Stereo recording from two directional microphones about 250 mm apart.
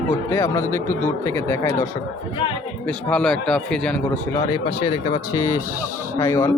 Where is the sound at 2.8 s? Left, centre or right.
Centre.